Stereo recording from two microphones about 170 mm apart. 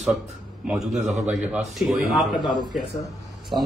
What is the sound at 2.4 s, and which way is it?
Speech, 25° left (ahead or behind).